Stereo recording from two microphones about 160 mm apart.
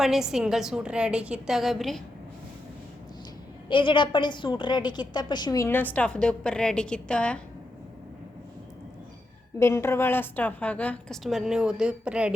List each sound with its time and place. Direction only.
0.0 s a woman's voice: centre (ahead or behind)
3.7 s a woman's voice: 30° left (ahead or behind); by 7.4 s 5° left (ahead or behind)
9.6 s a woman's voice: 15° left (ahead or behind); by 12.3 s 5° right (ahead or behind)